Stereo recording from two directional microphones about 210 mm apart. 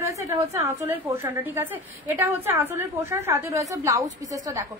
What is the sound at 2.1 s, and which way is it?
A woman's voice, 10° right (ahead or behind).